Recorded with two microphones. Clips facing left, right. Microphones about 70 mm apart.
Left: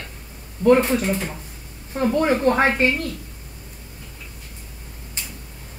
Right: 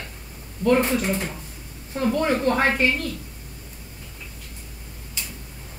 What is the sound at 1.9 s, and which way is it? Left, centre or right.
Speech, left.